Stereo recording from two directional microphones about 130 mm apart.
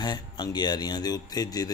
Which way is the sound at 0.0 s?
30° left (ahead or behind).